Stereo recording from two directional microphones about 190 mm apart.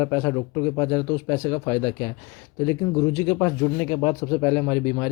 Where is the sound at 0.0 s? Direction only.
15° left (ahead or behind).